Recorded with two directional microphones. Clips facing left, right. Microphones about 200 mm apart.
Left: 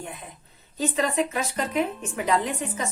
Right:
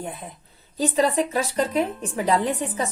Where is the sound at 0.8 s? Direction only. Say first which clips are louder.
Right 3 dB; 35° right (ahead or behind).